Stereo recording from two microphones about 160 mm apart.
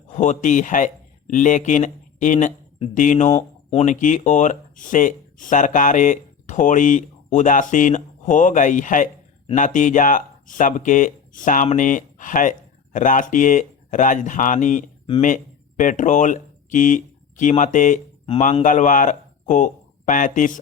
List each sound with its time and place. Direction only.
0.2 s speech: 50° left (ahead or behind)